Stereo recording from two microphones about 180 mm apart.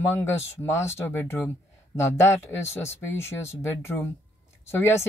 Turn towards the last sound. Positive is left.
turn(degrees=15)  # may be behind; listen again after turning